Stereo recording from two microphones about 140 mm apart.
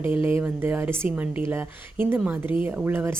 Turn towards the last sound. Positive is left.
turn(degrees=-15)  # may be behind; listen again after turning